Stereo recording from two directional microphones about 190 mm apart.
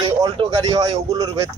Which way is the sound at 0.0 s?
25° right (ahead or behind).